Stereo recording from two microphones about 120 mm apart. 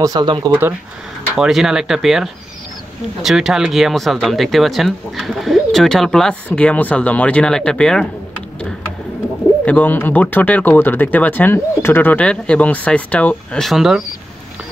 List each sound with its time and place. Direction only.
0.0 s speech: 35° right (ahead or behind)
1.3 s speech: 5° right (ahead or behind)
9.7 s speech: 15° left (ahead or behind); by 14.0 s centre (ahead or behind)